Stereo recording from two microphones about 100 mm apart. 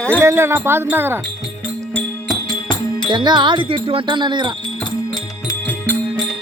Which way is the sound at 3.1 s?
50° right (ahead or behind).